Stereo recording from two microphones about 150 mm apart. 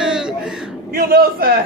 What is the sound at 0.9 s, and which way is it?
Speech, 85° right.